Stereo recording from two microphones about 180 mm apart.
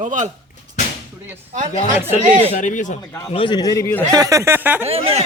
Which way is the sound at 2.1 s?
40° right (ahead or behind).